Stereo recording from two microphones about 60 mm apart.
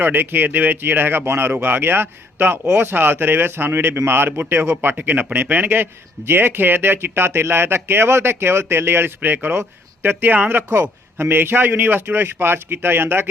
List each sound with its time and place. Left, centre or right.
0.0 s a man's voice: right
4.8 s a man's voice: right